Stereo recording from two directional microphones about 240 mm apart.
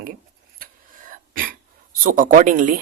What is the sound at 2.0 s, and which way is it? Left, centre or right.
Speech, right.